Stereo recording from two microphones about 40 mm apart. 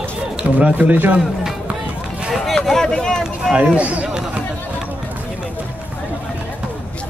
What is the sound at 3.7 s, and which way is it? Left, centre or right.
Speech, right.